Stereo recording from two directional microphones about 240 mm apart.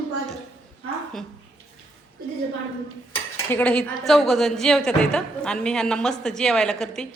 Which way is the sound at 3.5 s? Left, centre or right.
Centre.